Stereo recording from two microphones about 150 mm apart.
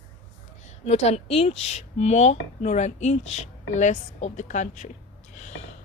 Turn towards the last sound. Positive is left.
turn(degrees=55)  # may be behind; listen again after turning